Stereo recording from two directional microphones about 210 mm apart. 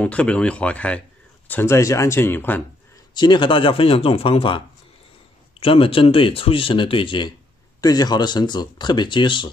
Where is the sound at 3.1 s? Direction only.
20° left (ahead or behind).